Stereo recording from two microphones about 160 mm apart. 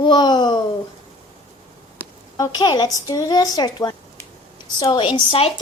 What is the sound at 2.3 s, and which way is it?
A woman's voice, 25° left (ahead or behind).